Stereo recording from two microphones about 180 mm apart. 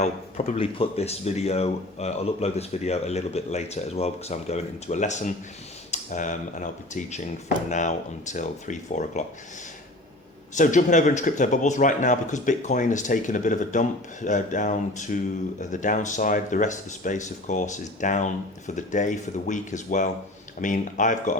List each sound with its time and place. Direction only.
0.0 s speech: 40° left (ahead or behind)
10.5 s speech: 45° left (ahead or behind)